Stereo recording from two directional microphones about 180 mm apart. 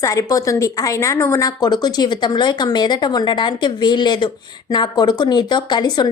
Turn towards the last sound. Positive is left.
turn(degrees=25)  # may be behind; listen again after turning